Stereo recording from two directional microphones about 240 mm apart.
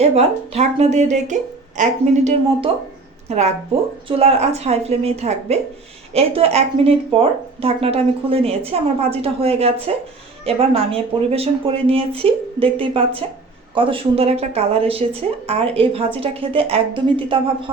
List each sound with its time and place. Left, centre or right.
0.0 s a woman's voice: right